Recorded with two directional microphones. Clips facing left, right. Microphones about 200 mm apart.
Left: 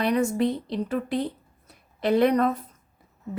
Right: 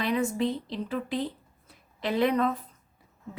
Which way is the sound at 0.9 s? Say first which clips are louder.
Left 3 dB; 45° left (ahead or behind).